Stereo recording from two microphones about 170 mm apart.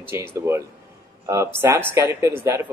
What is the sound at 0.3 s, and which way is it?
Speech, 15° right (ahead or behind).